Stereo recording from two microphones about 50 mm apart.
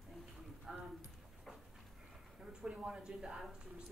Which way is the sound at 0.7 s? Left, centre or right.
Centre.